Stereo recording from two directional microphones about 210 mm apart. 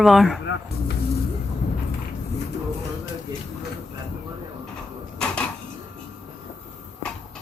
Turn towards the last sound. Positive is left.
turn(degrees=5)  # may be behind; listen again after turning